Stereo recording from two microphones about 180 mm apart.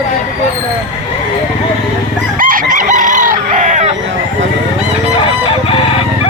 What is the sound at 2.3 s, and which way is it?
Chicken, 50° right (ahead or behind).